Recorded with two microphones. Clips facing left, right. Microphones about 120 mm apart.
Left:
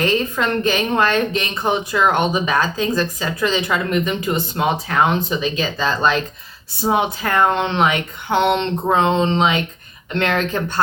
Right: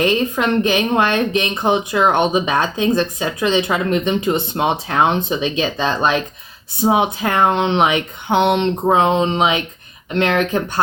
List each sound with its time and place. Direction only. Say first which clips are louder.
0.0 s a woman's voice: right 2 dB; 15° right (ahead or behind)